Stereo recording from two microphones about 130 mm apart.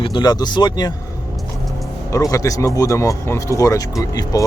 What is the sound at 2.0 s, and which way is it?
Speech, 25° left (ahead or behind).